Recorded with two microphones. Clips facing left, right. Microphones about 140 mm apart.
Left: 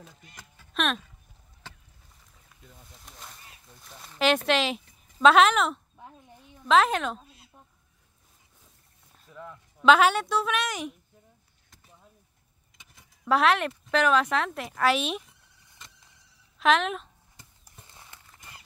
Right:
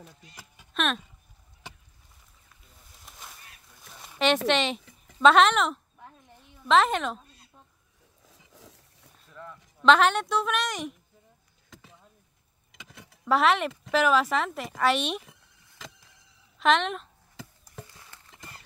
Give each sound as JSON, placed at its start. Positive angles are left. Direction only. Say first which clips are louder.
{"t": 0.7, "sound": "speech", "louder": "even", "side_deg": 0}
{"t": 1.6, "sound": "chop", "louder": "right 2 dB", "side_deg": -15}
{"t": 3.1, "sound": "a sound", "louder": "even", "side_deg": 0}
{"t": 4.2, "sound": "speech", "louder": "even", "side_deg": 0}
{"t": 6.0, "sound": "a sound", "louder": "left 2 dB", "side_deg": 20}
{"t": 6.6, "sound": "a woman's voice", "louder": "even", "side_deg": 0}
{"t": 8.3, "sound": "a sound", "louder": "right 11 dB", "side_deg": -90}
{"t": 9.3, "sound": "speech", "louder": "left 1 dB", "side_deg": 10}
{"t": 12.7, "sound": "vehicle", "louder": "right 9 dB", "side_deg": -80}
{"t": 13.2, "sound": "speech", "louder": "even", "side_deg": 0}
{"t": 15.8, "sound": "power windows", "louder": "right 8 dB", "side_deg": -90}
{"t": 16.5, "sound": "speech", "louder": "even", "side_deg": 0}
{"t": 17.8, "sound": "horse", "louder": "even", "side_deg": 25}